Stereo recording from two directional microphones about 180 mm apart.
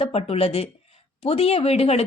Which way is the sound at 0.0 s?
35° left (ahead or behind).